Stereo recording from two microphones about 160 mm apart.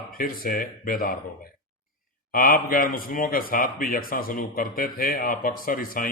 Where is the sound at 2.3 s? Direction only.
65° left (ahead or behind).